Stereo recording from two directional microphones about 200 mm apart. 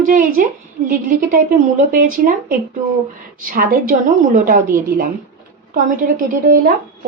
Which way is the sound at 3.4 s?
40° right (ahead or behind).